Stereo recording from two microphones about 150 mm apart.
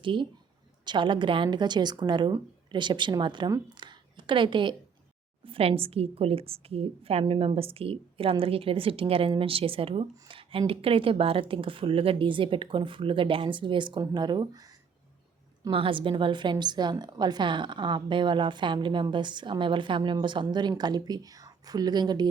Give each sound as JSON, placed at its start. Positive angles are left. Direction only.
{"t": 0.0, "sound": "a woman's voice", "side_deg": -35}
{"t": 15.7, "sound": "a woman's voice", "side_deg": -35}